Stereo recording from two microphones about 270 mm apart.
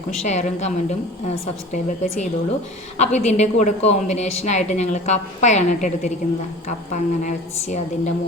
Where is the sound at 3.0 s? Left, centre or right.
Left.